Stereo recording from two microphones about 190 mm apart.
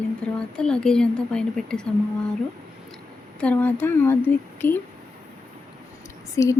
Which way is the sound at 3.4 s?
5° left (ahead or behind).